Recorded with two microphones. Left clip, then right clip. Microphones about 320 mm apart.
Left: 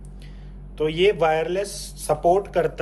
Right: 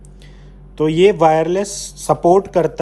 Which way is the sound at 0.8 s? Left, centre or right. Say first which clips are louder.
Right 7 dB; right.